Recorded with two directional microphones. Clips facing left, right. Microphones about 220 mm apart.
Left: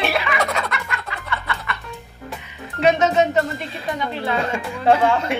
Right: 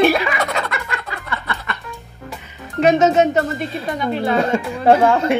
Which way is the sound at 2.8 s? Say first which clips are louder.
Right 3 dB; 45° right (ahead or behind).